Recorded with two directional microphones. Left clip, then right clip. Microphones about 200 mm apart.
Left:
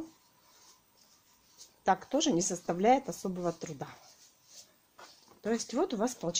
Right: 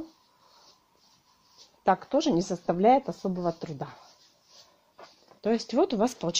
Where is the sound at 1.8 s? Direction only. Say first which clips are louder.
Right 4 dB; 25° right (ahead or behind).